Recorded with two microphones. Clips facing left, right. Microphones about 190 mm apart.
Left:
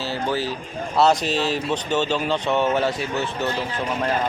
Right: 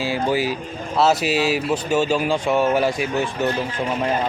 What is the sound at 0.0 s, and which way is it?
Speech, 10° right (ahead or behind).